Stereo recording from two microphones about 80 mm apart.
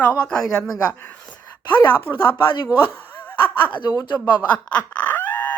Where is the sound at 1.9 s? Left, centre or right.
Left.